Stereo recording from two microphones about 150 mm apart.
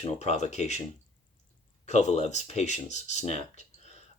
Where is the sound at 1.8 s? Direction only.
50° left (ahead or behind).